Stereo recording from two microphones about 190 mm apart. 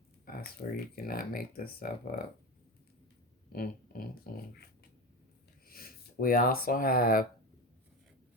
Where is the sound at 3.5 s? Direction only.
50° left (ahead or behind).